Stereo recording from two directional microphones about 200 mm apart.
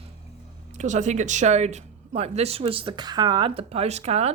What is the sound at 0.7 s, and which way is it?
Speech, 35° right (ahead or behind).